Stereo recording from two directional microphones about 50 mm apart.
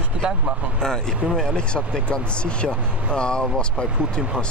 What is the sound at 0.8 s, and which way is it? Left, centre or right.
Speech, centre.